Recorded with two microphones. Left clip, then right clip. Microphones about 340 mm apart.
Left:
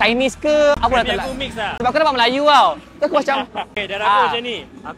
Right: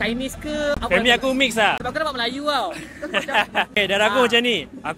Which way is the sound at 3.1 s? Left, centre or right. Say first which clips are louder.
Left 2 dB; right.